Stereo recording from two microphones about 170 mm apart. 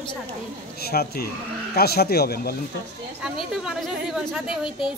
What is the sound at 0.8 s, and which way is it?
Speech, 65° left (ahead or behind).